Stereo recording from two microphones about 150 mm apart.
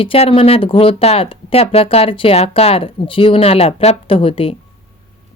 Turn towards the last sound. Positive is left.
turn(degrees=40)  # may be behind; listen again after turning